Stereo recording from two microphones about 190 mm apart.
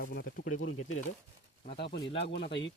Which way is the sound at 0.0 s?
55° left (ahead or behind).